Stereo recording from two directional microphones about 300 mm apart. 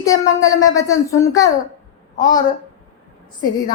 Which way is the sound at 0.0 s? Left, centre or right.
Centre.